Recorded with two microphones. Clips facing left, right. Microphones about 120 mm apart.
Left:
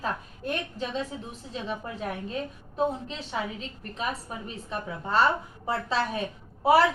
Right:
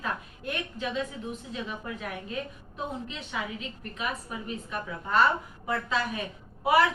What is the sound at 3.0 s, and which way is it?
A woman's voice, 35° left (ahead or behind).